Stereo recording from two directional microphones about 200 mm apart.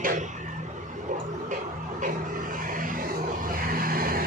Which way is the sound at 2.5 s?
45° right (ahead or behind).